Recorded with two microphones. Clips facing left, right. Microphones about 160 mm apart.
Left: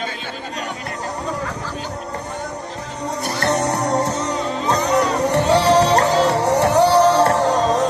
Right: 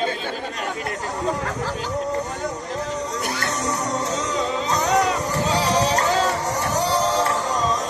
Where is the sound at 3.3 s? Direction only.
60° left (ahead or behind).